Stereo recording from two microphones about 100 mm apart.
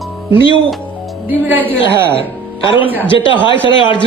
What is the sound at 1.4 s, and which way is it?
Speech, 20° right (ahead or behind).